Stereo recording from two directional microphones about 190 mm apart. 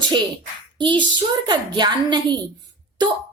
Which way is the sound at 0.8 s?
25° right (ahead or behind).